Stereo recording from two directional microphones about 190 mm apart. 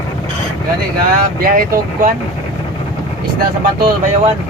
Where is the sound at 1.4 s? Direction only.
50° right (ahead or behind).